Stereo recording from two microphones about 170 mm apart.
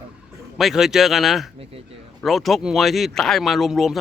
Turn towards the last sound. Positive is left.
turn(degrees=0)  # may be behind; listen again after turning